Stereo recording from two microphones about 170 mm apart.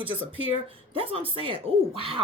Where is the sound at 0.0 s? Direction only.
30° right (ahead or behind).